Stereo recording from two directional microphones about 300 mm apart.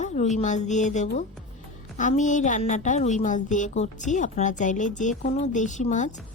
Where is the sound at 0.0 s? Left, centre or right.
Left.